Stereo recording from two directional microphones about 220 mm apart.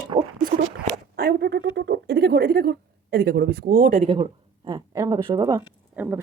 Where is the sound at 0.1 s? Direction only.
25° right (ahead or behind).